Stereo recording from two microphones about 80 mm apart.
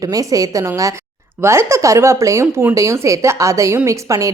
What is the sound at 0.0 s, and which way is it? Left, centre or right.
Speech, right.